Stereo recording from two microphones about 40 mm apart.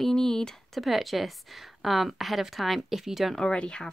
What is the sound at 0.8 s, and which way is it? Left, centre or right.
Speech, centre.